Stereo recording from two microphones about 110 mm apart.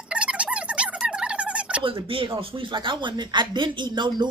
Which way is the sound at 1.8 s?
50° right (ahead or behind).